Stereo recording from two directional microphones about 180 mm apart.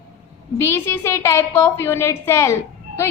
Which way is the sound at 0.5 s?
15° left (ahead or behind).